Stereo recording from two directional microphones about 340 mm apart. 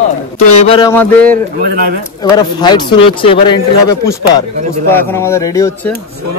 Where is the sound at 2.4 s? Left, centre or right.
Centre.